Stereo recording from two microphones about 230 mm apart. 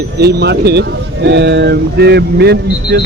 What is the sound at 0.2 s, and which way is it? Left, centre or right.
Speech, right.